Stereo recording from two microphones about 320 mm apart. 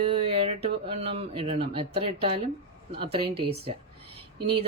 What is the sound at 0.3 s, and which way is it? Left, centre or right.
Speech, centre.